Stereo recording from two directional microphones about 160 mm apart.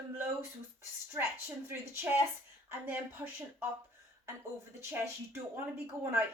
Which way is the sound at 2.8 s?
10° right (ahead or behind).